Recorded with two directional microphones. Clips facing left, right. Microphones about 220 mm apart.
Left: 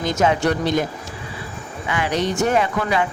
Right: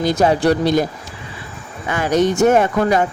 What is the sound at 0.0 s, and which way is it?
Speech, 35° right (ahead or behind).